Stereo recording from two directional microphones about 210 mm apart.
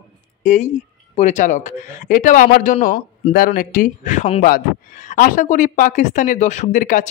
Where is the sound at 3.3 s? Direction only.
45° left (ahead or behind).